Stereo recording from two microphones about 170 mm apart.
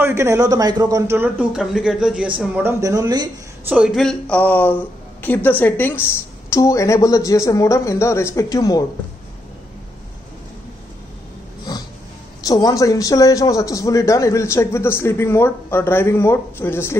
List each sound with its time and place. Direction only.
0.0 s a man's voice: 15° right (ahead or behind)
2.8 s speech: 20° right (ahead or behind)
3.6 s a man's voice: 5° right (ahead or behind); by 8.8 s 20° left (ahead or behind)
12.4 s a man's voice: 20° left (ahead or behind)